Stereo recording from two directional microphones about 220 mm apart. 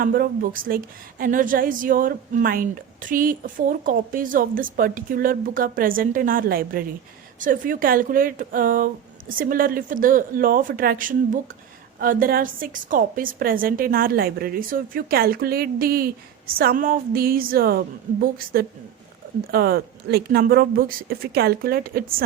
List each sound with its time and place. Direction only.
0.0 s a woman's voice: 40° right (ahead or behind)